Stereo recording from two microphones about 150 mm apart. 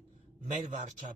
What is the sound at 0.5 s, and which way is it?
Speech, 50° right (ahead or behind).